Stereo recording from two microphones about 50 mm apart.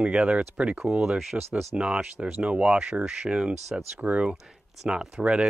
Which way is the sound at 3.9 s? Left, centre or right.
Right.